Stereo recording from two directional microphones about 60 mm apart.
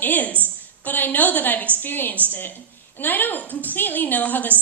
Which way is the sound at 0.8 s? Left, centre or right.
Left.